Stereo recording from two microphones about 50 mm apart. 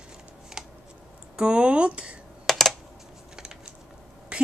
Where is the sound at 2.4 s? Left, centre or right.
Centre.